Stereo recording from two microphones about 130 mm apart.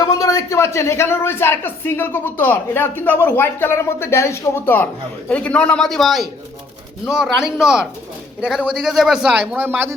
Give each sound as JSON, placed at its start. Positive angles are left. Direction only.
{"t": 0.0, "sound": "a man's voice", "side_deg": 25}